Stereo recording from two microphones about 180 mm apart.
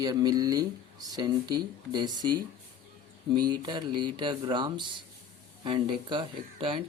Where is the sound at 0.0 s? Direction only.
20° right (ahead or behind).